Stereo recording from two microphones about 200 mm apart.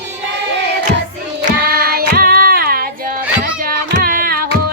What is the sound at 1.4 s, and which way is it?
Child singing, 45° right (ahead or behind).